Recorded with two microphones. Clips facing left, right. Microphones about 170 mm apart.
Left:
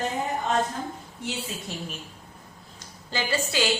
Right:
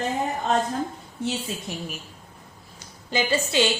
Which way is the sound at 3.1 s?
20° right (ahead or behind).